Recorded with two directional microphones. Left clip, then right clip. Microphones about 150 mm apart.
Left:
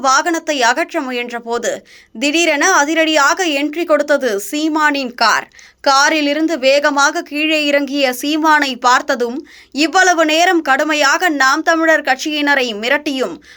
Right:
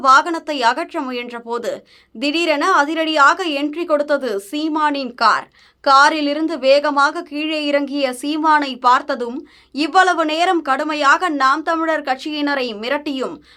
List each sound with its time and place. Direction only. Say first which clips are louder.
0.0 s a woman's voice: right 1 dB; 15° left (ahead or behind)